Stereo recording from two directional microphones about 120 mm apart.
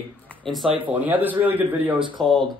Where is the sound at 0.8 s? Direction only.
15° right (ahead or behind).